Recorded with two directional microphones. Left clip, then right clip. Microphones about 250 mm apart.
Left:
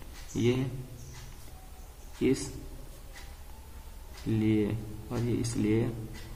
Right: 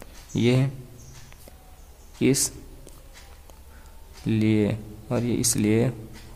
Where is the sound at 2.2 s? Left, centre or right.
Right.